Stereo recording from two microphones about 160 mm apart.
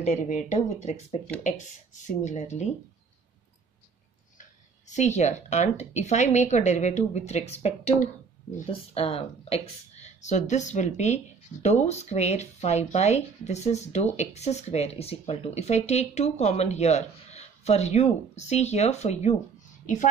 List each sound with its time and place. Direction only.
0.0 s speech: 45° left (ahead or behind)
4.4 s speech: 50° left (ahead or behind)